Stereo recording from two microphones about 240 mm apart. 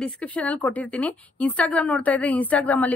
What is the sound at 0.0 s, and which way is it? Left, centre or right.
A woman's voice, centre.